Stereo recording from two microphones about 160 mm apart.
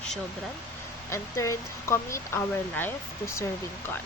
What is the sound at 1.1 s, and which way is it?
A woman's voice, 20° left (ahead or behind).